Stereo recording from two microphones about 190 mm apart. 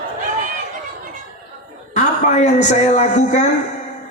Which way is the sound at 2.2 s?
35° left (ahead or behind).